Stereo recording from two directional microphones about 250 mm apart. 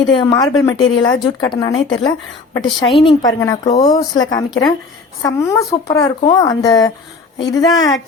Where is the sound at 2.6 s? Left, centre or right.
Centre.